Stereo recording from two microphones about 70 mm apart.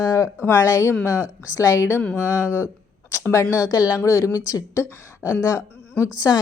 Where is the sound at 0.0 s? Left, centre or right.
Left.